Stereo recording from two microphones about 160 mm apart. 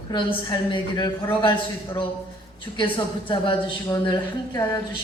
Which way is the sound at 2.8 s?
30° left (ahead or behind).